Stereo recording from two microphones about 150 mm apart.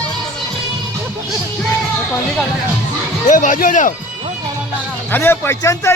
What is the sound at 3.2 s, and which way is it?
Speech, 55° left (ahead or behind).